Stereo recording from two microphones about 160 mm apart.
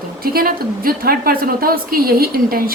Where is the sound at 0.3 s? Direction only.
70° right (ahead or behind).